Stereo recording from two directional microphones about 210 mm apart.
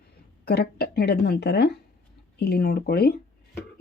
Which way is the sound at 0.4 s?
50° left (ahead or behind).